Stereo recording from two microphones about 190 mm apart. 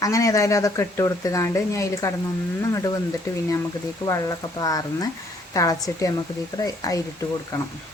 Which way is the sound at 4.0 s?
20° left (ahead or behind).